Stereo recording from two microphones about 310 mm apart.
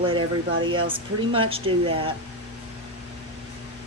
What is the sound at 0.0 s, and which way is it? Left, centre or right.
Speech, centre.